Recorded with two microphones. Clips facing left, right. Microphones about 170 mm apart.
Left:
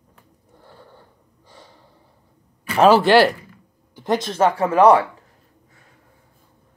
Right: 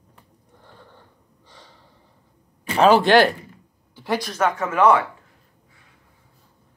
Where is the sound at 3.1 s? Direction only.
5° left (ahead or behind).